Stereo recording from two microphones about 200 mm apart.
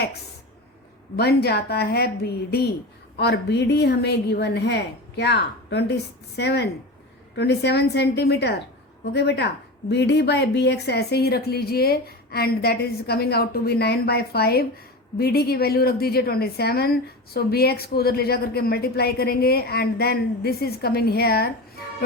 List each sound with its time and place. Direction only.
1.1 s a woman's voice: 55° left (ahead or behind)